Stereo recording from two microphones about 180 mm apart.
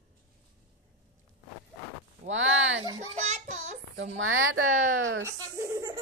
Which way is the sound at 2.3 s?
90° right.